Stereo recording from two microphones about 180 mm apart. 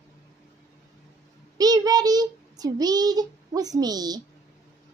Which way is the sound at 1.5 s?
20° right (ahead or behind).